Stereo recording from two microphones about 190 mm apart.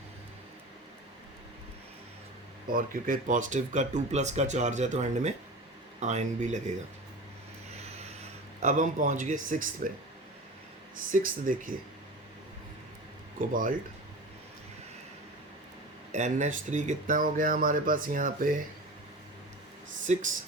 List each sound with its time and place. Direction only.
2.6 s speech: 50° right (ahead or behind)
8.6 s speech: 40° right (ahead or behind)
10.9 s speech: 45° right (ahead or behind)
13.4 s speech: 45° right (ahead or behind)
16.1 s speech: 40° right (ahead or behind)
20.1 s speech: 40° right (ahead or behind)